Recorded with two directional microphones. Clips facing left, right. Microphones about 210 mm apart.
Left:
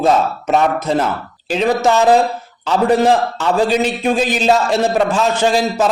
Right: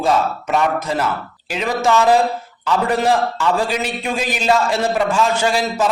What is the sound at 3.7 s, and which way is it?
A man's voice, 25° left (ahead or behind).